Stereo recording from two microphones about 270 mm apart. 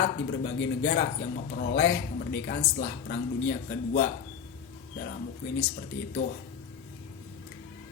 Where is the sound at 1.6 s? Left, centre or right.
Left.